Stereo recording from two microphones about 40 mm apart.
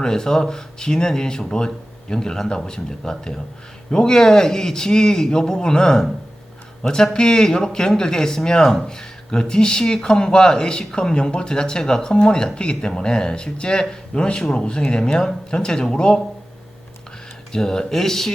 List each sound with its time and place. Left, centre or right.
0.0 s speech: centre
17.5 s speech: centre